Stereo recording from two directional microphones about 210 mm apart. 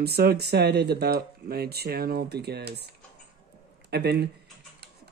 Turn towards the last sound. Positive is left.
turn(degrees=-50)  # may be behind; listen again after turning